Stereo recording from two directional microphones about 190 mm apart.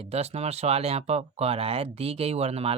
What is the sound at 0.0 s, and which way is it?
Speech, 35° right (ahead or behind).